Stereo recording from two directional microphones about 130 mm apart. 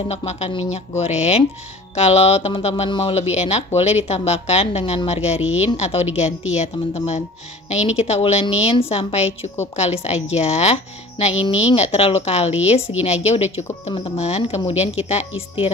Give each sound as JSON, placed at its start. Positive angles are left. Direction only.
{"t": 0.1, "sound": "a woman's voice", "side_deg": 55}